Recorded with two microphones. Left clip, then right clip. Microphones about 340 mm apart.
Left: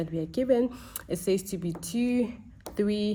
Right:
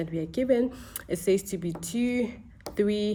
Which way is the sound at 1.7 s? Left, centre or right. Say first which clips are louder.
Right 1 dB; right.